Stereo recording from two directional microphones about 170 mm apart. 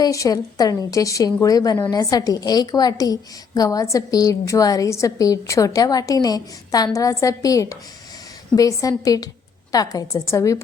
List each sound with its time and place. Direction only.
0.0 s a woman's voice: 20° left (ahead or behind)